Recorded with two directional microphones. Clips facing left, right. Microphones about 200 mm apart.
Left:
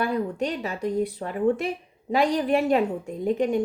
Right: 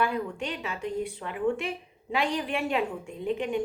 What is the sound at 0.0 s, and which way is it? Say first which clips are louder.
A woman's voice: left 4 dB; 40° left (ahead or behind).